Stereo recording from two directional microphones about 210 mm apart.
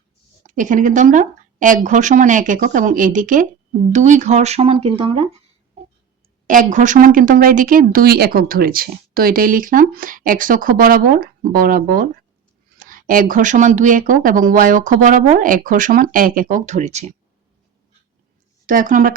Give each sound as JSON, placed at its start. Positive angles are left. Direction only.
{"t": 0.4, "sound": "speech", "side_deg": -40}
{"t": 6.5, "sound": "speech", "side_deg": -35}
{"t": 18.6, "sound": "speech", "side_deg": -40}